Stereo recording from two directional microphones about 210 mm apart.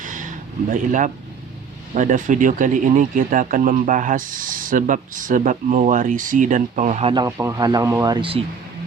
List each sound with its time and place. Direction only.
0.0 s a sound: 40° right (ahead or behind)
2.0 s speech: 40° right (ahead or behind)
7.1 s speech: 15° right (ahead or behind)